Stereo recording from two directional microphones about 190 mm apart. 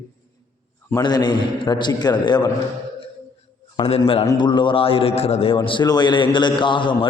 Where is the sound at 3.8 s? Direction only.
30° left (ahead or behind).